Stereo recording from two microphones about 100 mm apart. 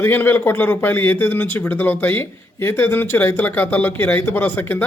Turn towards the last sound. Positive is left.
turn(degrees=20)  # may be behind; listen again after turning